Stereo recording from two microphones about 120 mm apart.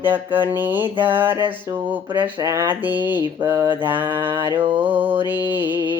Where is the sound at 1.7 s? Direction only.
25° right (ahead or behind).